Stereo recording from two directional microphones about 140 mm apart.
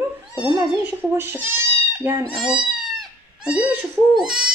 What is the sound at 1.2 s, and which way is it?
Speech, 15° right (ahead or behind).